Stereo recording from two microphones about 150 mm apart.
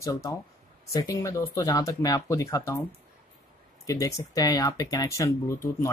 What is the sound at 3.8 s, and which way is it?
Speech, 20° left (ahead or behind).